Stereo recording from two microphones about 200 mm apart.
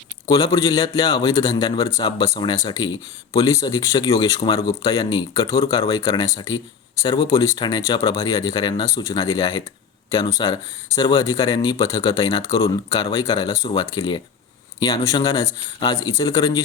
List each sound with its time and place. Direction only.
0.3 s speech: 20° left (ahead or behind)